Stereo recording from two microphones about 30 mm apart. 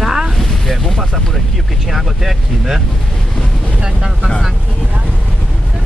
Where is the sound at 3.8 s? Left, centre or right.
Centre.